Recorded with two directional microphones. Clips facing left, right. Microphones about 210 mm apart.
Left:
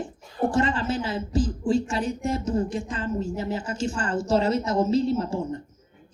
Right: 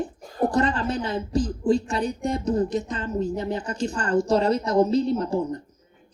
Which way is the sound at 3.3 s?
5° left (ahead or behind).